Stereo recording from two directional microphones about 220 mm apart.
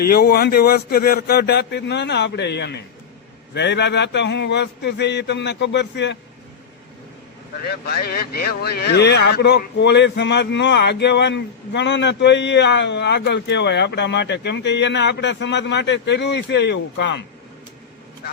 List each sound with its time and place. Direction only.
0.0 s speech: 45° left (ahead or behind)
7.6 s speech: 45° left (ahead or behind)